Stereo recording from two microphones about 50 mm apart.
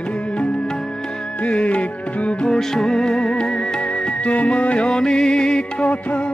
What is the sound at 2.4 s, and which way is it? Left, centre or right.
Music, centre.